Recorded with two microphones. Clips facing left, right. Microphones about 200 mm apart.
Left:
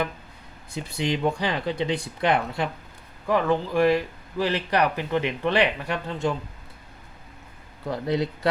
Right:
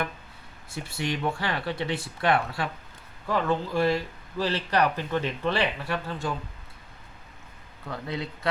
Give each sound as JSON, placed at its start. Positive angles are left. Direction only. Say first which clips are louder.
{"t": 0.7, "sound": "speech", "louder": "left 4 dB", "side_deg": 20}
{"t": 7.9, "sound": "speech", "louder": "left 8 dB", "side_deg": 35}